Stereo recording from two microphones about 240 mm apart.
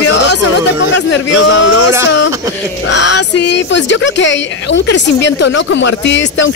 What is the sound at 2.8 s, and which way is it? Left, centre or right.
Speech, left.